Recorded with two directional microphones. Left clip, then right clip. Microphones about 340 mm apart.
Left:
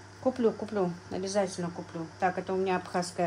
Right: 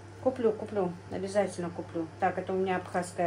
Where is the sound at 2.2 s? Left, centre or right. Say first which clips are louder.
Left 1 dB; left.